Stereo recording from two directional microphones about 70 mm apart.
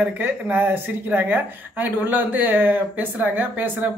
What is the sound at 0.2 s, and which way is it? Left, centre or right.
Speech, right.